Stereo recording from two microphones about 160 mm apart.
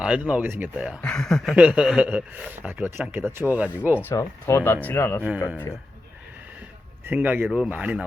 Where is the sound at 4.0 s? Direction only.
15° left (ahead or behind).